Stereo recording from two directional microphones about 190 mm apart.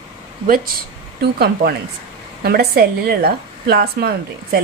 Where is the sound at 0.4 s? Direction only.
50° right (ahead or behind).